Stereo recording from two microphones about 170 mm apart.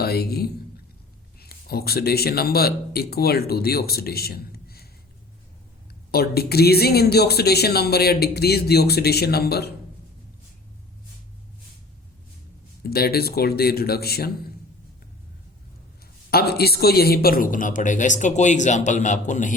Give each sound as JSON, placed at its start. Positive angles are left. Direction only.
{"t": 0.0, "sound": "speech", "side_deg": 65}
{"t": 6.1, "sound": "speech", "side_deg": 65}
{"t": 12.8, "sound": "a man's voice", "side_deg": 65}
{"t": 16.3, "sound": "speech", "side_deg": 65}